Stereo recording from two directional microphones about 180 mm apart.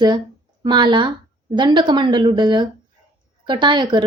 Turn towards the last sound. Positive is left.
turn(degrees=-25)  # may be behind; listen again after turning